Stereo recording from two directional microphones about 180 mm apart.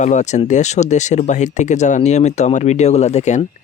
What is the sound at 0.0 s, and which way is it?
Speech, 40° left (ahead or behind).